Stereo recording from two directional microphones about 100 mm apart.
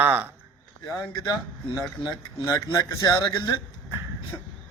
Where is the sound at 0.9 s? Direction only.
40° left (ahead or behind).